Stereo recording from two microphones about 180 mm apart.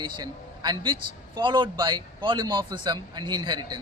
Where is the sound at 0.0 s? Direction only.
20° right (ahead or behind).